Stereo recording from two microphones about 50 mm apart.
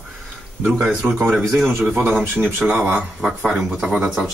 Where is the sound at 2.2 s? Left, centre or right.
Right.